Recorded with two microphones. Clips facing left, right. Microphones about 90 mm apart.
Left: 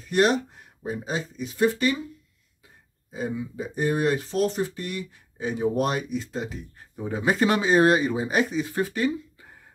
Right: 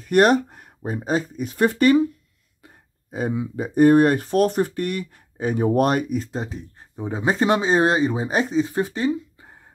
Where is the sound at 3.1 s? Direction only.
65° right (ahead or behind).